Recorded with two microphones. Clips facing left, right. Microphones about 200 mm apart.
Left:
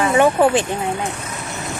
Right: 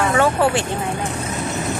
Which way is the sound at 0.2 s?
15° left (ahead or behind).